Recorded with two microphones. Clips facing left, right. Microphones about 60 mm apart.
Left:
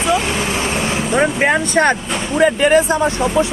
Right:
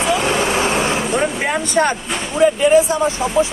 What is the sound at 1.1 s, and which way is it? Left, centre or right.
Speech, left.